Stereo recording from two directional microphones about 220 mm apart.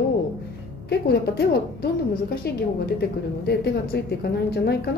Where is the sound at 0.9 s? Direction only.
45° left (ahead or behind).